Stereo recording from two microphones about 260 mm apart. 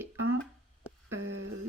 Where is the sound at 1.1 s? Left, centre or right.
Right.